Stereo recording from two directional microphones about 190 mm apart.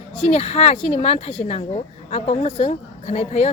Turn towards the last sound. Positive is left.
turn(degrees=35)  # may be behind; listen again after turning